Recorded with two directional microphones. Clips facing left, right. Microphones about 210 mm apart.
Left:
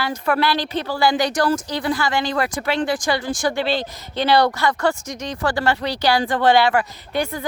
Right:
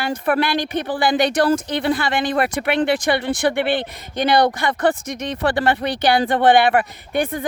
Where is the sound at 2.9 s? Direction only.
60° right (ahead or behind).